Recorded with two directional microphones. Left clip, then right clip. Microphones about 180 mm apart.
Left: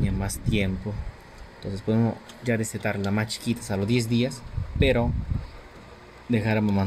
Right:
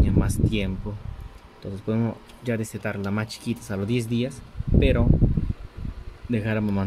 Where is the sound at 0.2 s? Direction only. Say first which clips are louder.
Right 1 dB; 15° right (ahead or behind).